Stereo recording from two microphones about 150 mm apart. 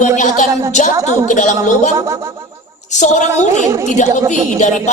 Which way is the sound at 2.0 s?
20° right (ahead or behind).